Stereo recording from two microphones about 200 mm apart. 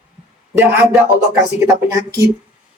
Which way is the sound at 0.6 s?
10° right (ahead or behind).